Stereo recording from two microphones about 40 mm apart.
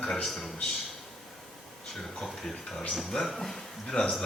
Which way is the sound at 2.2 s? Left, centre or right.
Centre.